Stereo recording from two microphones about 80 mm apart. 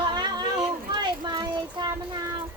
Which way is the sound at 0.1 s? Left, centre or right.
Right.